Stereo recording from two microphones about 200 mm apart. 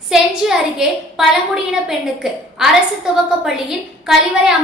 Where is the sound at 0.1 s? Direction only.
Centre (ahead or behind).